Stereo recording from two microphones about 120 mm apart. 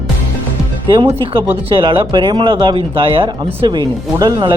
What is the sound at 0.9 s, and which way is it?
Speech, 45° right (ahead or behind).